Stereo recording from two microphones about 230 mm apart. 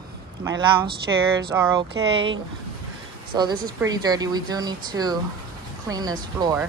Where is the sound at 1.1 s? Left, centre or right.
Centre.